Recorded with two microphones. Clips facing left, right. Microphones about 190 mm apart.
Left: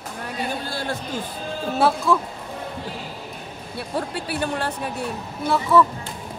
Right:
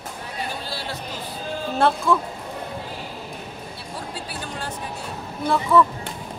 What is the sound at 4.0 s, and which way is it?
Speech, 65° left (ahead or behind).